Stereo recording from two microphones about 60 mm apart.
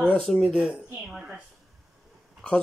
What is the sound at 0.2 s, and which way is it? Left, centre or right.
Speech, centre.